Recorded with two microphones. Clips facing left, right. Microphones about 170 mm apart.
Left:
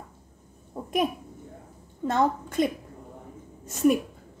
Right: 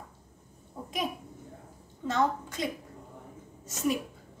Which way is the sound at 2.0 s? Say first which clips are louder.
Left 4 dB; 55° left (ahead or behind).